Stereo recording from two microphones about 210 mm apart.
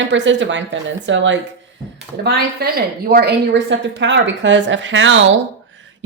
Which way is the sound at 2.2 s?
50° right (ahead or behind).